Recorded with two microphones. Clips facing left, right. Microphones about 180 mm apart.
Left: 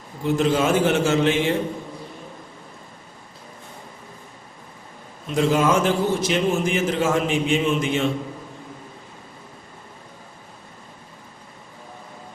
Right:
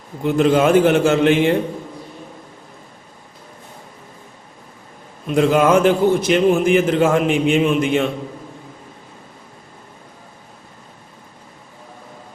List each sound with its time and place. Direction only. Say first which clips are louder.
0.3 s a man's voice: right 6 dB; 60° right (ahead or behind)
5.3 s a man's voice: right 5 dB; 60° right (ahead or behind)